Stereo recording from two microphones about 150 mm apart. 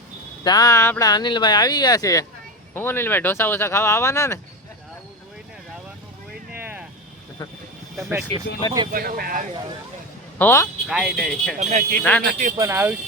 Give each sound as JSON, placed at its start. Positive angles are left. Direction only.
{"t": 0.4, "sound": "speech", "side_deg": 25}
{"t": 6.5, "sound": "vehicle", "side_deg": -10}
{"t": 8.9, "sound": "speech", "side_deg": -75}
{"t": 10.3, "sound": "speech", "side_deg": 15}
{"t": 10.8, "sound": "speech", "side_deg": 0}
{"t": 11.6, "sound": "speech", "side_deg": -55}
{"t": 12.0, "sound": "speech", "side_deg": 10}
{"t": 12.3, "sound": "speech", "side_deg": -60}
{"t": 12.5, "sound": "speech", "side_deg": -15}